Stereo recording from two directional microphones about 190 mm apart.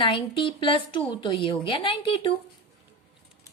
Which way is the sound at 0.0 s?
25° left (ahead or behind).